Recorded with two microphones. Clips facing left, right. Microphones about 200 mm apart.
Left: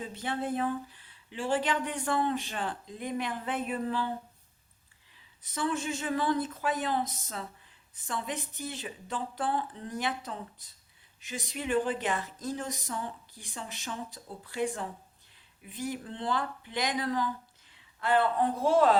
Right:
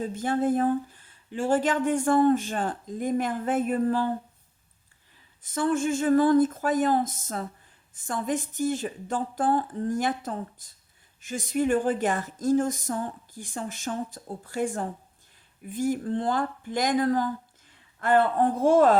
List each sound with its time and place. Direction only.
0.0 s speech: 45° right (ahead or behind)
5.1 s speech: 50° right (ahead or behind)